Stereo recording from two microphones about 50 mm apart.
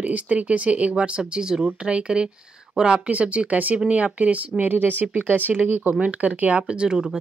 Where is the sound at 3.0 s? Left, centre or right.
Right; by 7.1 s centre.